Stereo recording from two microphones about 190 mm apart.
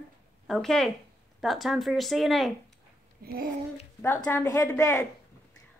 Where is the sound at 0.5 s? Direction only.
Centre (ahead or behind).